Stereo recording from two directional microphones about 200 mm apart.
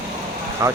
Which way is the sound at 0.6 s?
15° right (ahead or behind).